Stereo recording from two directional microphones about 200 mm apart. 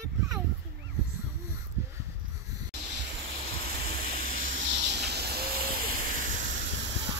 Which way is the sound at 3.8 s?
50° right (ahead or behind).